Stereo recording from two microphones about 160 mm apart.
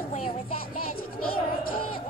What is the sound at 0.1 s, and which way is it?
Music, 35° left (ahead or behind).